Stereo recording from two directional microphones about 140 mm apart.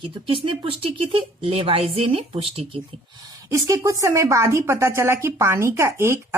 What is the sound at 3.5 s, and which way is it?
A woman's voice, 25° right (ahead or behind).